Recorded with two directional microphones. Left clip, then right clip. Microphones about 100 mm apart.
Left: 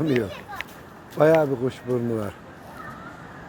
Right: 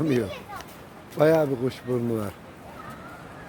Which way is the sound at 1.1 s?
15° right (ahead or behind).